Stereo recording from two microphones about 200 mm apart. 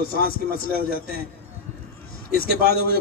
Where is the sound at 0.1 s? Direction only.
50° left (ahead or behind).